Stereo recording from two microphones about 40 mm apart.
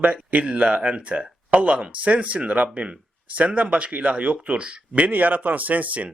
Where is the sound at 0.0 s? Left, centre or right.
Right.